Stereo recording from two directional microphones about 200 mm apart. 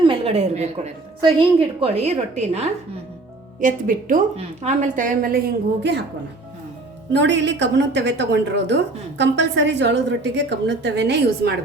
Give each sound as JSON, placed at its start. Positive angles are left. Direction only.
{"t": 0.0, "sound": "a sound", "side_deg": -25}
{"t": 1.2, "sound": "a woman's voice", "side_deg": -30}
{"t": 7.1, "sound": "a woman's voice", "side_deg": -60}